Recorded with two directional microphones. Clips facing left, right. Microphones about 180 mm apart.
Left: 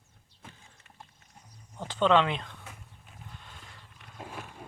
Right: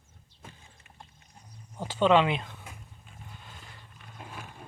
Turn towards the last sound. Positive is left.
turn(degrees=0)  # may be behind; listen again after turning